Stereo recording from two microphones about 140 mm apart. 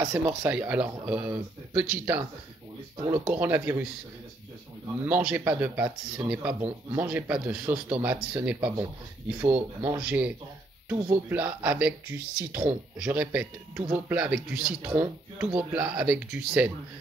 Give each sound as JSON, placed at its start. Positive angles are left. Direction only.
{"t": 0.0, "sound": "speech", "side_deg": -20}
{"t": 0.5, "sound": "speech", "side_deg": -10}
{"t": 5.0, "sound": "speech", "side_deg": -10}
{"t": 6.6, "sound": "speech", "side_deg": -25}
{"t": 7.1, "sound": "speech", "side_deg": -10}
{"t": 8.5, "sound": "speech", "side_deg": -30}
{"t": 9.9, "sound": "speech", "side_deg": -10}